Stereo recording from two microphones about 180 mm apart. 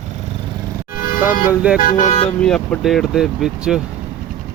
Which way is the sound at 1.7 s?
45° left (ahead or behind).